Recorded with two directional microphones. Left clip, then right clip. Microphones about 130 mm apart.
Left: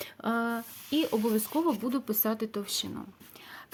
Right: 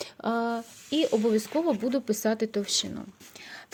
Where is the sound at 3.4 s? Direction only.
35° right (ahead or behind).